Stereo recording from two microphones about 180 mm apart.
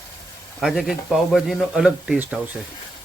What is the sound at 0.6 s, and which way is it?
A man's voice, centre (ahead or behind).